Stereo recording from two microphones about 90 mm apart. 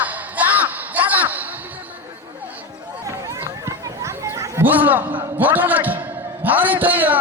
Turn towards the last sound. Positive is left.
turn(degrees=-20)  # may be behind; listen again after turning